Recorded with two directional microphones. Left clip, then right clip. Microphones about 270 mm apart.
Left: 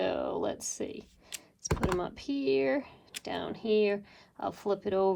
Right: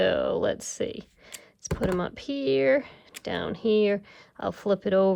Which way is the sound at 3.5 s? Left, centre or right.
Right.